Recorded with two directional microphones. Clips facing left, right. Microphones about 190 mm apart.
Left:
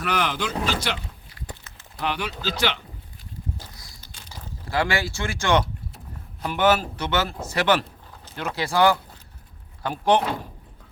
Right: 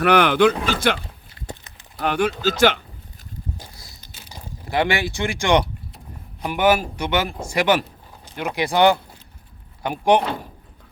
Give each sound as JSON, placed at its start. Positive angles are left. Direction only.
{"t": 0.0, "sound": "speech", "side_deg": -65}
{"t": 1.4, "sound": "a sound", "side_deg": -25}
{"t": 2.0, "sound": "speech", "side_deg": -50}
{"t": 3.7, "sound": "boat", "side_deg": -25}
{"t": 4.3, "sound": "speech", "side_deg": -15}